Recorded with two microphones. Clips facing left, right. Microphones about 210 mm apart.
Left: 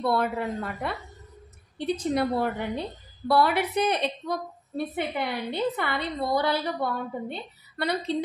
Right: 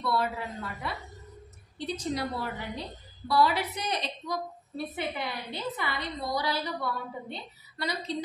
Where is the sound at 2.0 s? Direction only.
55° left (ahead or behind).